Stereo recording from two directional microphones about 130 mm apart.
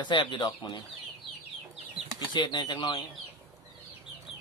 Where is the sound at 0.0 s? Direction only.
35° left (ahead or behind).